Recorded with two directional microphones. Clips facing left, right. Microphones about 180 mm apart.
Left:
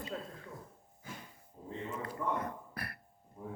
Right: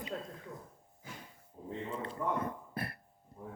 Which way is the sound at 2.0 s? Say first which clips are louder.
Right 1 dB; 25° right (ahead or behind).